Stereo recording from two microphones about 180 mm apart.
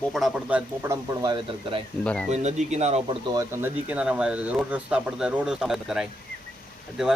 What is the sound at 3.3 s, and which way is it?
Speech, 15° right (ahead or behind).